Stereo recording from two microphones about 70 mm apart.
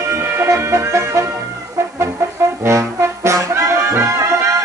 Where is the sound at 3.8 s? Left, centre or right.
Right.